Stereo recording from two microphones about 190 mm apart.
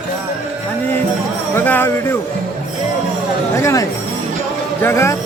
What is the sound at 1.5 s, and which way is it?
Speech, 10° left (ahead or behind).